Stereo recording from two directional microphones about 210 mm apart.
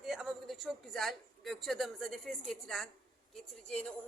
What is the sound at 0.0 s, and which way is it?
A man's voice, centre (ahead or behind).